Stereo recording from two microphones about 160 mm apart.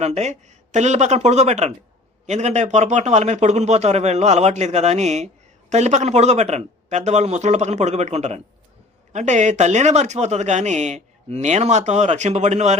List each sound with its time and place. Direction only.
0.0 s a man's voice: 45° right (ahead or behind)